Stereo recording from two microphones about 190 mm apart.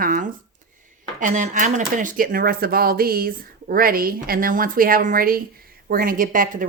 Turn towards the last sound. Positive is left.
turn(degrees=-45)  # may be behind; listen again after turning